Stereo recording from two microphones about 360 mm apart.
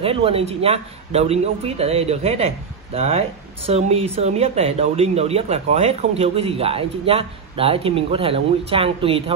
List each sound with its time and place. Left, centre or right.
0.0 s a man's voice: centre